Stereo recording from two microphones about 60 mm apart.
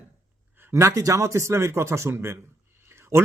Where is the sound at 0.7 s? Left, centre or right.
Right.